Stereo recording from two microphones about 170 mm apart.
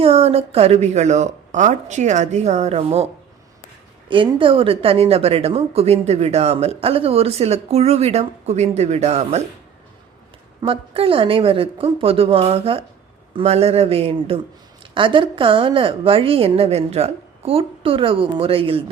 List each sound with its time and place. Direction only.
0.0 s speech: 35° right (ahead or behind)
4.1 s speech: 30° right (ahead or behind)
10.6 s speech: 30° right (ahead or behind)